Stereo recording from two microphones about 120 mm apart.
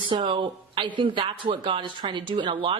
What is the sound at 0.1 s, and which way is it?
Speech, 45° right (ahead or behind).